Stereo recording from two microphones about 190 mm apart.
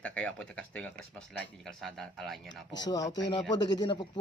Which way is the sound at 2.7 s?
20° left (ahead or behind).